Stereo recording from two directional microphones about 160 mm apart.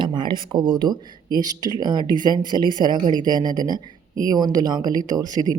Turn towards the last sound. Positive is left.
turn(degrees=-25)  # may be behind; listen again after turning